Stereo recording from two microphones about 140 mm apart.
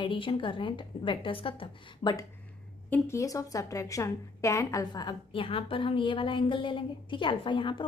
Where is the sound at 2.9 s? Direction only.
20° left (ahead or behind).